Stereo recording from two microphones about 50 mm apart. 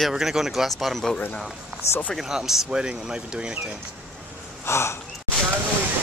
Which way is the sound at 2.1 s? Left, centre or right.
Centre.